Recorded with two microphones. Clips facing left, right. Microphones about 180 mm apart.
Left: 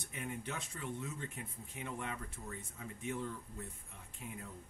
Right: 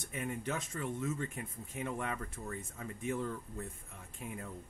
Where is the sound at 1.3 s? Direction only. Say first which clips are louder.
Right 5 dB; 50° right (ahead or behind).